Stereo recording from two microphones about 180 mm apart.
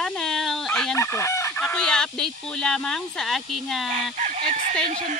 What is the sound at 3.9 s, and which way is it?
Fowl, 40° right (ahead or behind).